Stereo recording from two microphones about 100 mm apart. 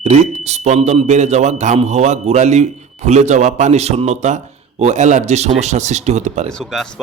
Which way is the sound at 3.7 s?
90° right.